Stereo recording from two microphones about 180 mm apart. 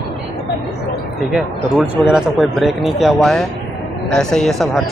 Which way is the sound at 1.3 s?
5° right (ahead or behind).